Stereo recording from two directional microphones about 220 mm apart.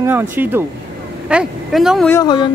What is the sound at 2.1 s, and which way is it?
Speech, 15° left (ahead or behind).